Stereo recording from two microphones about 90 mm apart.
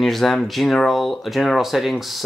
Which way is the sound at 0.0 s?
Centre (ahead or behind).